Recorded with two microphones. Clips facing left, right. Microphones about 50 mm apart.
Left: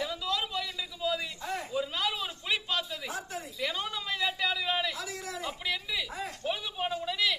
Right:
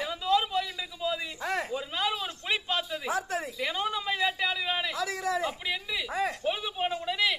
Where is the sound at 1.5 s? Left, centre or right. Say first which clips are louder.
Right 6 dB; right.